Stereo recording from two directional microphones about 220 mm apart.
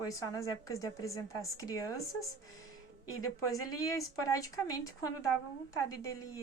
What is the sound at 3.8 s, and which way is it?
Speech, 15° left (ahead or behind).